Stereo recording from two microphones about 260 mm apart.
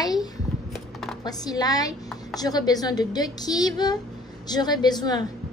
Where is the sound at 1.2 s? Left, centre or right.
Centre.